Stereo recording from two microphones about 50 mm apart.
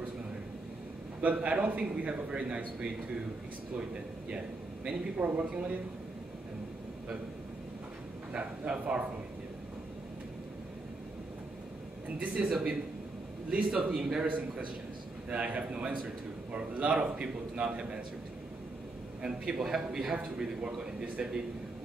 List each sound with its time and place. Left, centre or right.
1.2 s a man's voice: right
4.8 s a man's voice: right
8.3 s a man's voice: right
12.4 s a man's voice: centre
15.2 s a man's voice: right
19.2 s a man's voice: centre